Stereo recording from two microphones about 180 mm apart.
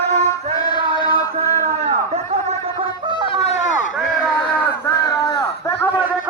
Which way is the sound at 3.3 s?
35° left (ahead or behind).